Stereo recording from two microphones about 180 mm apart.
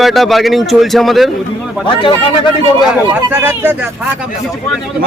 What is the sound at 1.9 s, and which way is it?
Speech, 25° left (ahead or behind).